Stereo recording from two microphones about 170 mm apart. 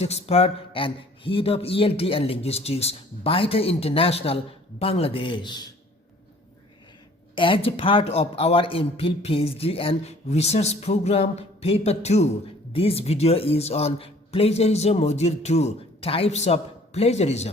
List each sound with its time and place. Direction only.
0.0 s a man's voice: 40° left (ahead or behind)
7.3 s a man's voice: 30° left (ahead or behind)